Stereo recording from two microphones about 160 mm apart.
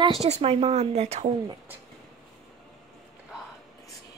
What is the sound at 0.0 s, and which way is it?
Speech, 40° right (ahead or behind).